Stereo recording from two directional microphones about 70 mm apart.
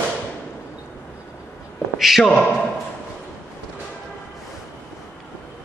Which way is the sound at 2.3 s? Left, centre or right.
Centre.